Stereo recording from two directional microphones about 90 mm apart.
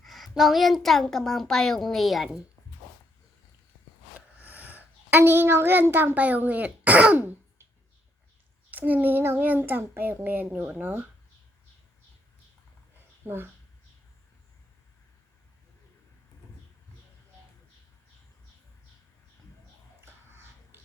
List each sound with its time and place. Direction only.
0.0 s a woman's voice: centre (ahead or behind)
4.4 s a woman's voice: 15° right (ahead or behind)
8.7 s a child's voice: 20° right (ahead or behind)
13.2 s a child's voice: 25° right (ahead or behind)